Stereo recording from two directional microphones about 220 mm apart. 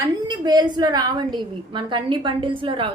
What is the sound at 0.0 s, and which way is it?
A woman's voice, 20° right (ahead or behind).